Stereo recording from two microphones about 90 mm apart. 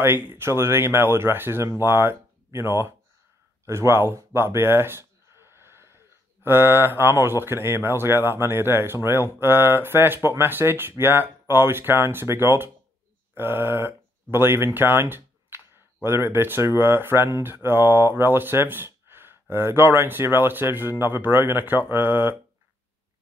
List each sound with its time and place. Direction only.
0.0 s speech: 25° right (ahead or behind)
3.6 s a sound: 30° right (ahead or behind)
6.4 s speech: 25° right (ahead or behind)